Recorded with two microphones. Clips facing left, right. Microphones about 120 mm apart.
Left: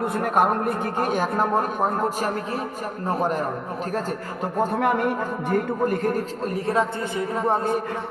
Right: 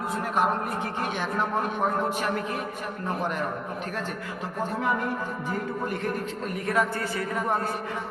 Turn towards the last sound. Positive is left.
turn(degrees=25)  # may be behind; listen again after turning